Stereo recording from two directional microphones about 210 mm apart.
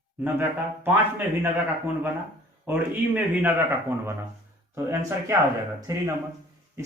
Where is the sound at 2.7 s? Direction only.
5° right (ahead or behind).